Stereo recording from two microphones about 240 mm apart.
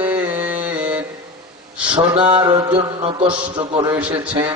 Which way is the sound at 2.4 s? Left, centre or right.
Centre.